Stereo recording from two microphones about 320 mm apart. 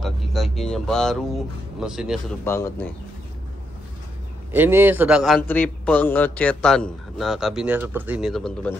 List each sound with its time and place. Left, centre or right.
0.0 s a man's voice: centre
4.5 s a man's voice: centre